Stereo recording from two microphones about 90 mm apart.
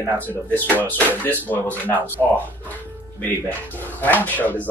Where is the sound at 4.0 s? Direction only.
20° left (ahead or behind).